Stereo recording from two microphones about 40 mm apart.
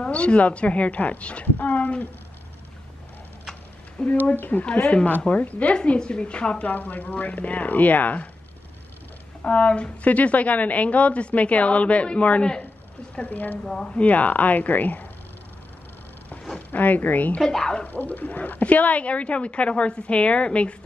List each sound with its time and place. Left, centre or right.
0.0 s a woman's voice: left
4.0 s a woman's voice: left
5.9 s a woman's voice: left
6.7 s a woman's voice: left
9.4 s a woman's voice: left
13.3 s speech: left
13.8 s speech: left
16.5 s speech: left
17.4 s speech: centre
17.8 s a woman's voice: left